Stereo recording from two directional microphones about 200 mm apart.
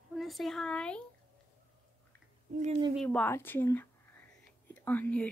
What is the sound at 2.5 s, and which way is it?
Speech, 35° right (ahead or behind).